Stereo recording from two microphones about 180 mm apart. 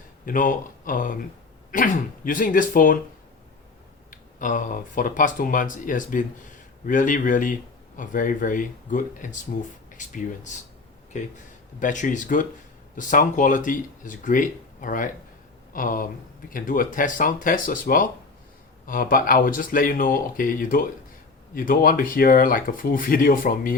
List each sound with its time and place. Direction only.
0.3 s speech: 50° left (ahead or behind)
4.1 s speech: 45° left (ahead or behind)